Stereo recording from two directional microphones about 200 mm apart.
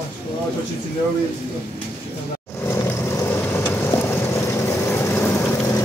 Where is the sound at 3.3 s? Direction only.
10° left (ahead or behind).